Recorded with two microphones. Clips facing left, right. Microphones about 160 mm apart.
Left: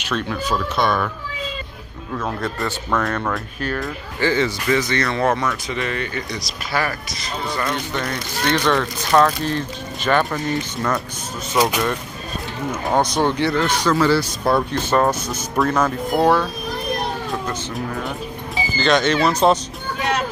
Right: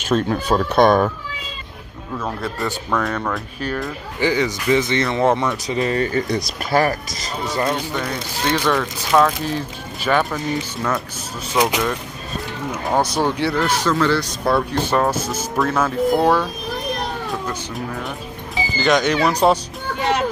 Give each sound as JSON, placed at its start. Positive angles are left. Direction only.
{"t": 0.1, "sound": "speech", "side_deg": -30}
{"t": 0.5, "sound": "speech", "side_deg": -50}
{"t": 2.1, "sound": "speech", "side_deg": -5}
{"t": 7.5, "sound": "speech", "side_deg": -25}
{"t": 7.9, "sound": "speech", "side_deg": -5}
{"t": 12.8, "sound": "speech", "side_deg": -5}
{"t": 14.7, "sound": "speech", "side_deg": -10}
{"t": 18.8, "sound": "speech", "side_deg": -15}